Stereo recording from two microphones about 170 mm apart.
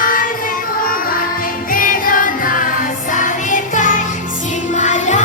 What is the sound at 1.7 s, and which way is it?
Music, 55° left (ahead or behind).